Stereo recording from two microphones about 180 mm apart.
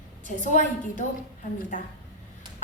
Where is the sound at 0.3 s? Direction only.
45° left (ahead or behind).